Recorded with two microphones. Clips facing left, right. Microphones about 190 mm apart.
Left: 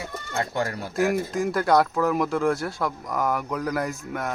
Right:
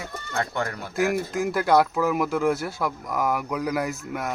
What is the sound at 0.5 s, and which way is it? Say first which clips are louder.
Speech: left 2 dB; 35° left (ahead or behind).